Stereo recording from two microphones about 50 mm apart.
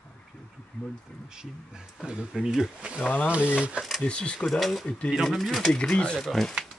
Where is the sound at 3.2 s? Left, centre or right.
Right.